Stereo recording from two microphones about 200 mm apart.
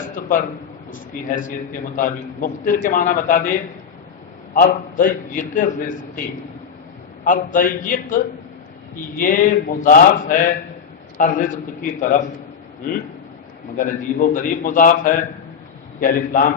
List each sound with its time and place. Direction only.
0.2 s a man's voice: 40° left (ahead or behind)
7.3 s a man's voice: 45° left (ahead or behind)
9.2 s a man's voice: 40° left (ahead or behind)
13.7 s a man's voice: 40° left (ahead or behind)